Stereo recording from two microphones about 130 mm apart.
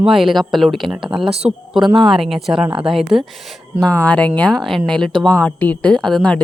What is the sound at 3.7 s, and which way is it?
Speech, 10° left (ahead or behind).